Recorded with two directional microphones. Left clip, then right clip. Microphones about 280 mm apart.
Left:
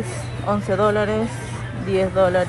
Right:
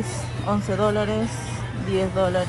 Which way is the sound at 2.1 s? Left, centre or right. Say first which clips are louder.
Left 6 dB; centre.